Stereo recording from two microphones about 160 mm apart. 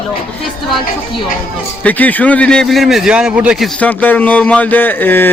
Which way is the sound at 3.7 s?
10° left (ahead or behind).